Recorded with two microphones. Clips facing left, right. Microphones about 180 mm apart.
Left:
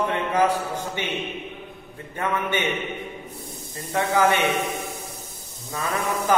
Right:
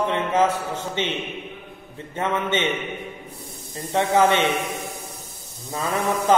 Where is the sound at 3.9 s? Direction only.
25° right (ahead or behind).